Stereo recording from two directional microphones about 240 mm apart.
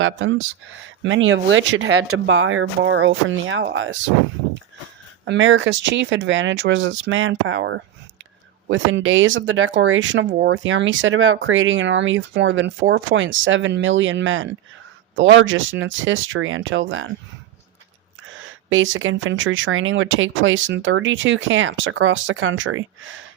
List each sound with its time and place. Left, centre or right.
0.0 s speech: right
5.2 s speech: right
18.7 s speech: right